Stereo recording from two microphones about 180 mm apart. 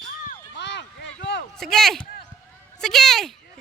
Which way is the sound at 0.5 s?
80° left.